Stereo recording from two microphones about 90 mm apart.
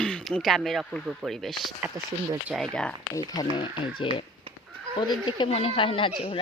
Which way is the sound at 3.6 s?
70° left (ahead or behind).